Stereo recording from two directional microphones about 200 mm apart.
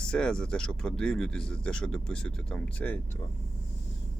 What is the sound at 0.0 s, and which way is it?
Speech, 5° left (ahead or behind).